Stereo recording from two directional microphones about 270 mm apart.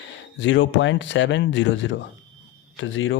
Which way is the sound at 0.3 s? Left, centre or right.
Left.